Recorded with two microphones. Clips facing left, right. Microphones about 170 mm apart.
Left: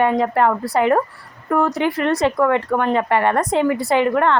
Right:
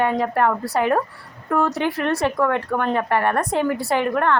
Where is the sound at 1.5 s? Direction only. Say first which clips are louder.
Left 2 dB; 15° left (ahead or behind).